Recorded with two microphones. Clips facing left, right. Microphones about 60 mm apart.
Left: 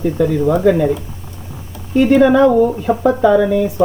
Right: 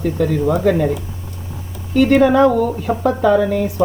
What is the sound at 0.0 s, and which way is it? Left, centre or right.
Speech, centre.